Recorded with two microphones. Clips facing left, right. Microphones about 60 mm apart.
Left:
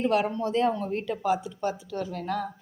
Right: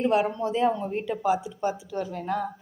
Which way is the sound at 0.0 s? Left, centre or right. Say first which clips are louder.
Right 1 dB; centre.